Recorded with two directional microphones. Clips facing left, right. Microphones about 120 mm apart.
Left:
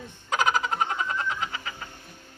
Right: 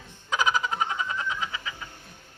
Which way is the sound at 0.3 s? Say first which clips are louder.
Left 1 dB; 50° left (ahead or behind).